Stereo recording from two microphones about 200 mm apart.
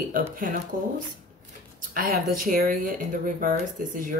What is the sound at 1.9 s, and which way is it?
Speech, 45° right (ahead or behind).